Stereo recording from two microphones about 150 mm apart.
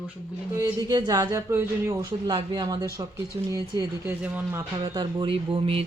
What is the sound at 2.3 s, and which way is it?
Speech, 30° right (ahead or behind).